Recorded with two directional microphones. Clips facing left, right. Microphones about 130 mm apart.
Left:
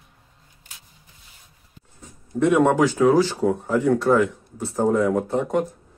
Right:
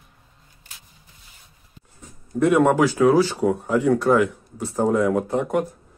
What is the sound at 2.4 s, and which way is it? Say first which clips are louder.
Speech: even; 5° right (ahead or behind).